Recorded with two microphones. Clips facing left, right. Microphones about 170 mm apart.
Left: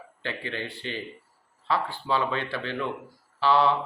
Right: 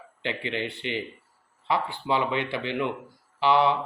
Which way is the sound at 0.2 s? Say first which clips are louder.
Right 3 dB; 20° right (ahead or behind).